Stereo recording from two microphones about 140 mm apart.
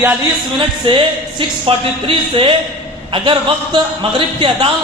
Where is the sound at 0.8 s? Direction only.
35° right (ahead or behind).